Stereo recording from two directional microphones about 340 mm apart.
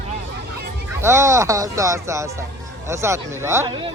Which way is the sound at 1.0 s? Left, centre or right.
Centre.